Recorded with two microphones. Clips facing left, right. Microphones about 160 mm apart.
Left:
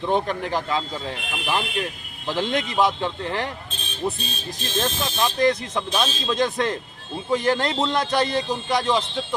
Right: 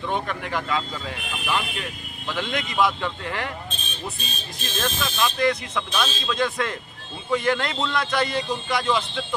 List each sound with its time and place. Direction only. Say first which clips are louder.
0.0 s speech: left 5 dB; 35° left (ahead or behind)
4.6 s speech: left 2 dB; 30° left (ahead or behind)